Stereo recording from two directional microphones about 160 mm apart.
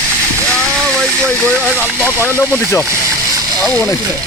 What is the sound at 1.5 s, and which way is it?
Speech, 15° right (ahead or behind).